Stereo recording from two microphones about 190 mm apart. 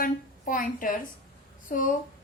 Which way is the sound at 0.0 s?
45° left (ahead or behind).